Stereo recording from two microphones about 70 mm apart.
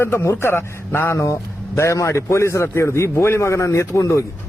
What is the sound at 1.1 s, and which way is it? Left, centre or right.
A man's voice, left.